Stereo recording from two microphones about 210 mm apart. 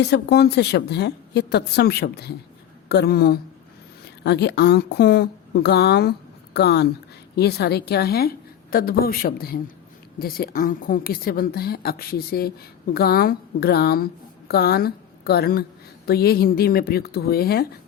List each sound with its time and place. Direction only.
0.0 s a woman's voice: 50° left (ahead or behind)